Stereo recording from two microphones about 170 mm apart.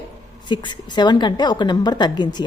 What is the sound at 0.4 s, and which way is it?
A woman's voice, 25° left (ahead or behind).